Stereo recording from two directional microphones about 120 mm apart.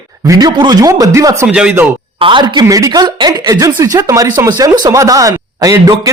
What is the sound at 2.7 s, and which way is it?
Speech, 30° right (ahead or behind).